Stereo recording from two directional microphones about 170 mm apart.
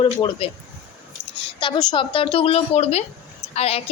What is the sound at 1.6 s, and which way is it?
Speech, 25° left (ahead or behind).